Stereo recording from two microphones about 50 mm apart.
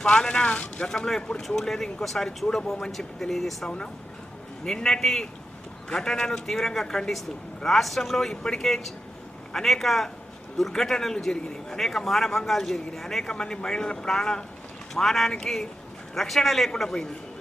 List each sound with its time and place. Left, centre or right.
0.0 s speech: centre
0.9 s a man's voice: centre